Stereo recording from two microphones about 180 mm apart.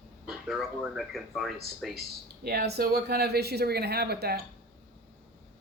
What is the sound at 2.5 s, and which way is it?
Speech, 60° right (ahead or behind).